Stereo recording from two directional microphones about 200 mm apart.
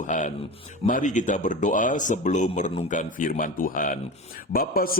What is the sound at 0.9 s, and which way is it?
A man's voice, 40° left (ahead or behind).